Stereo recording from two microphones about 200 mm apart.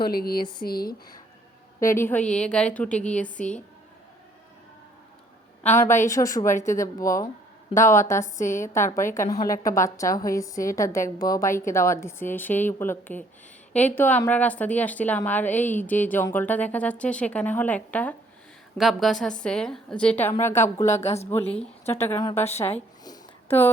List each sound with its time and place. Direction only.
0.0 s speech: 50° left (ahead or behind)
1.8 s a woman's voice: 15° left (ahead or behind)
5.6 s speech: 10° left (ahead or behind)
6.2 s a woman's voice: 25° left (ahead or behind)
6.5 s a woman's voice: 40° left (ahead or behind)
6.7 s speech: 15° left (ahead or behind)
8.2 s a woman's voice: 40° left (ahead or behind)
8.7 s a woman's voice: 15° left (ahead or behind)
20.8 s a woman's voice: 35° left (ahead or behind)
21.2 s speech: 10° left (ahead or behind)